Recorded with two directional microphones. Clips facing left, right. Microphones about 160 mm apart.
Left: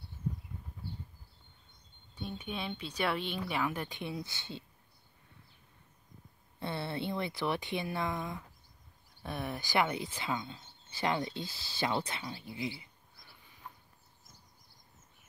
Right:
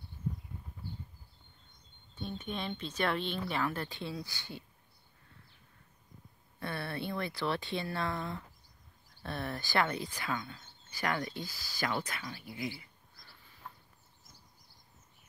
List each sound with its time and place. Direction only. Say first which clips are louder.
2.1 s speech: right 1 dB; 10° left (ahead or behind)
6.6 s speech: left 2 dB; 20° left (ahead or behind)